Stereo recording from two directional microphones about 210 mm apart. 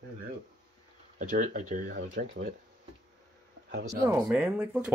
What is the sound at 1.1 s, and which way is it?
Speech, 35° right (ahead or behind).